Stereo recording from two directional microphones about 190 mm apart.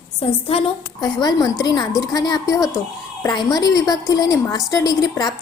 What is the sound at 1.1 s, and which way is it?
A woman's voice, 20° left (ahead or behind).